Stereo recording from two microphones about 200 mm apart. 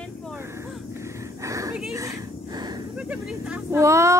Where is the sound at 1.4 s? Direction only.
15° right (ahead or behind).